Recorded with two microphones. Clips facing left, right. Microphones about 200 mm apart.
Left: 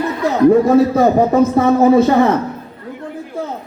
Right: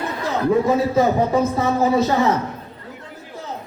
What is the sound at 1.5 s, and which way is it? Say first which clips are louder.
Speech: left 7 dB; 55° left (ahead or behind).